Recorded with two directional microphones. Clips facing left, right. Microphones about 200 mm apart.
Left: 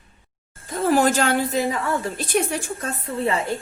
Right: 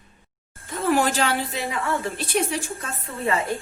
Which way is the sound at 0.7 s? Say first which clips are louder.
Left 3 dB; 35° left (ahead or behind).